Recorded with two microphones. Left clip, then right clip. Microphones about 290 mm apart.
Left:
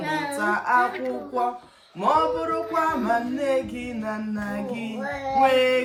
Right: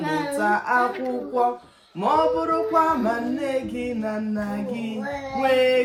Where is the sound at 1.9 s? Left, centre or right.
Centre.